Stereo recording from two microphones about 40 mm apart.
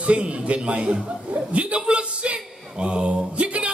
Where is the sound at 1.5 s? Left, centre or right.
Right.